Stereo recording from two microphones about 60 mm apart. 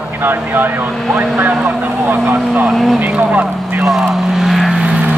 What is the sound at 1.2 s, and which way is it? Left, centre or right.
Speech, right.